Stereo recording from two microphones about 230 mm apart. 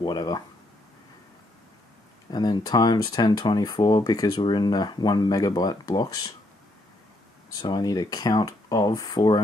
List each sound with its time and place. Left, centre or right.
0.0 s speech: centre
2.3 s speech: centre
7.5 s speech: centre